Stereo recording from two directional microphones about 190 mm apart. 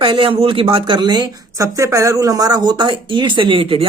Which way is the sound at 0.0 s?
30° right (ahead or behind).